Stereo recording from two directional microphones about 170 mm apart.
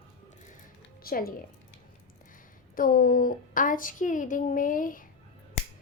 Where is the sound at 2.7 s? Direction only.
55° left (ahead or behind).